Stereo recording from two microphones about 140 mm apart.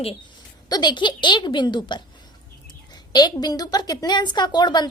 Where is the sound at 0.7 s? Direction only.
30° left (ahead or behind).